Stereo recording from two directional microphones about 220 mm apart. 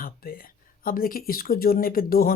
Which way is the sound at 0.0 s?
40° left (ahead or behind).